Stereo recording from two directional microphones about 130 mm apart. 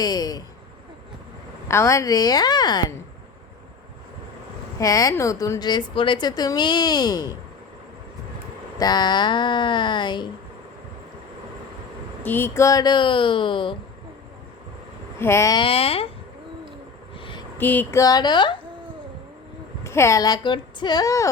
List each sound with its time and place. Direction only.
0.0 s speech: 30° left (ahead or behind)
1.6 s speech: 20° left (ahead or behind)
4.8 s speech: 25° left (ahead or behind)
8.8 s speech: 30° left (ahead or behind)
12.2 s speech: 15° left (ahead or behind); by 13.7 s 40° left (ahead or behind)
15.2 s speech: 20° left (ahead or behind)
15.5 s speech: 45° left (ahead or behind)
17.2 s a sound: 40° left (ahead or behind)
17.6 s a sound: 15° left (ahead or behind)
18.0 s speech: 30° left (ahead or behind)
19.8 s speech: 20° left (ahead or behind)